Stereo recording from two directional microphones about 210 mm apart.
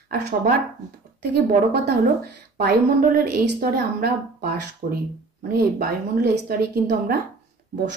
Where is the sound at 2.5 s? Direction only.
40° right (ahead or behind).